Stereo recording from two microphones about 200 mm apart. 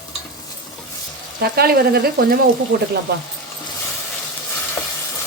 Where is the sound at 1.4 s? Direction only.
50° right (ahead or behind).